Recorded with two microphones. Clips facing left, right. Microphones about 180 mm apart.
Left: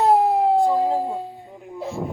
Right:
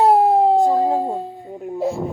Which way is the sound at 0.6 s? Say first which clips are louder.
Right 3 dB; 45° right (ahead or behind).